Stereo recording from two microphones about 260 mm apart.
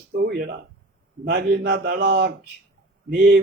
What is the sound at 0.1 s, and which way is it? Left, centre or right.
Speech, right.